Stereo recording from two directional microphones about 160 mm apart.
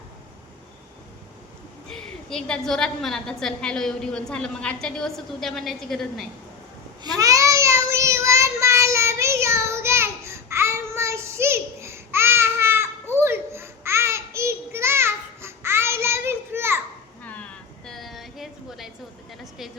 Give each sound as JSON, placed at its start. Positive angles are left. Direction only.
{"t": 1.9, "sound": "a woman's voice", "side_deg": 5}
{"t": 7.0, "sound": "child singing", "side_deg": -20}
{"t": 17.2, "sound": "a sound", "side_deg": 10}